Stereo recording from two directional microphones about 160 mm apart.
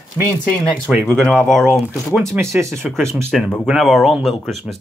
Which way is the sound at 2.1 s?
20° right (ahead or behind).